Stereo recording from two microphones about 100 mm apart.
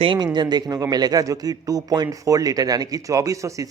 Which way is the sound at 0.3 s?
45° right (ahead or behind).